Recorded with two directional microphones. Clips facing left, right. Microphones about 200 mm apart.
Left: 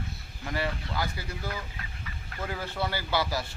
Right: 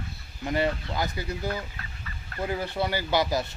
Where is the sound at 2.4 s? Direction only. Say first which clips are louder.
Right 4 dB; 15° right (ahead or behind).